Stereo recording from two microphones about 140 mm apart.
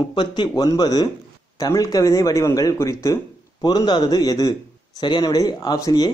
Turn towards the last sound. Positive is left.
turn(degrees=25)  # may be behind; listen again after turning